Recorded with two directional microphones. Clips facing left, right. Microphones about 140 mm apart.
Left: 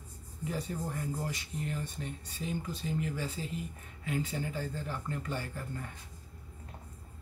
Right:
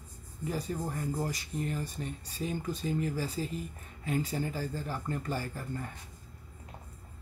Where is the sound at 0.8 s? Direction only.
40° right (ahead or behind).